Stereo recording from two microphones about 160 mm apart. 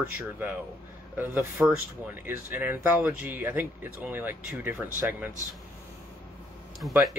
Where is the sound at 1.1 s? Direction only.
10° right (ahead or behind).